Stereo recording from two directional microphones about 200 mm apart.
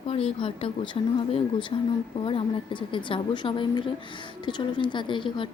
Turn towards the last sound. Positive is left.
turn(degrees=25)  # may be behind; listen again after turning